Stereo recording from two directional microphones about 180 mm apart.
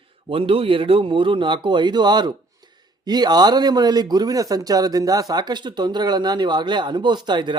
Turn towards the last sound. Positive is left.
turn(degrees=-25)  # may be behind; listen again after turning